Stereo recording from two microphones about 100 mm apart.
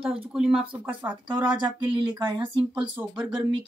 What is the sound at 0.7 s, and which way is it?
Speech, 20° right (ahead or behind).